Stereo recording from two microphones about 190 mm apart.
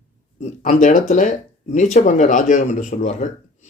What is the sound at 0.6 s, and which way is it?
A man's voice, 40° left (ahead or behind).